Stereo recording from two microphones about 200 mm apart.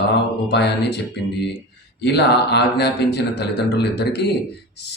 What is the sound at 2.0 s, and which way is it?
Speech, 55° left (ahead or behind).